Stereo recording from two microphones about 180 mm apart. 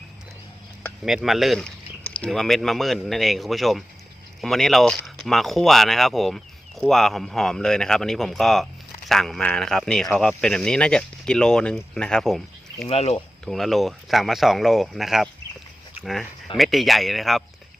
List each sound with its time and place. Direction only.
0.8 s a sound: 5° left (ahead or behind)
1.1 s speech: centre (ahead or behind)
12.9 s speech: 35° left (ahead or behind)
13.4 s speech: centre (ahead or behind)
16.6 s speech: centre (ahead or behind)